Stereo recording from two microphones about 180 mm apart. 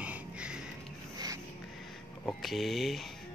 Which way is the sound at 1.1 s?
20° right (ahead or behind).